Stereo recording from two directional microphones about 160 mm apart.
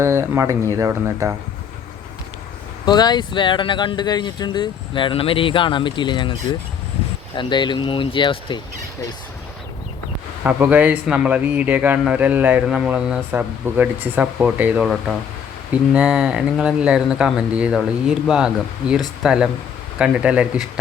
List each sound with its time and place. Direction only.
0.0 s speech: 15° right (ahead or behind)
2.8 s speech: 25° left (ahead or behind)
10.4 s speech: 10° right (ahead or behind)